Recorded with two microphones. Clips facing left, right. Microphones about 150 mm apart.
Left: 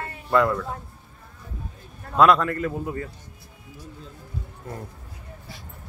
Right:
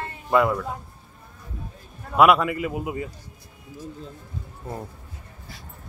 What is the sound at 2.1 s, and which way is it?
Speech, 10° right (ahead or behind).